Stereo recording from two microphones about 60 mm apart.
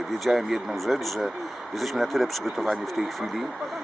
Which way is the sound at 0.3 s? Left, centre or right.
Centre.